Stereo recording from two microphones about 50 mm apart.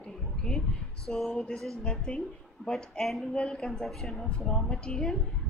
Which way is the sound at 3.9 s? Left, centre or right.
Centre.